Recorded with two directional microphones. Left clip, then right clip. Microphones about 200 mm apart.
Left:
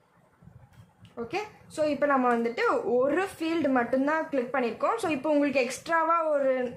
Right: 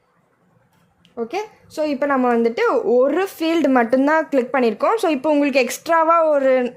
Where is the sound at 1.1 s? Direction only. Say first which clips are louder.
Right 8 dB; 40° right (ahead or behind).